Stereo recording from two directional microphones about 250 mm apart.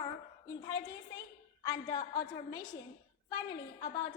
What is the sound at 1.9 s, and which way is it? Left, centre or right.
Speech, centre.